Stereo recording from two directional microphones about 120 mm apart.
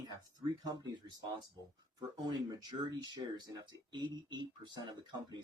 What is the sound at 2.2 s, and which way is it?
Speech, 35° right (ahead or behind).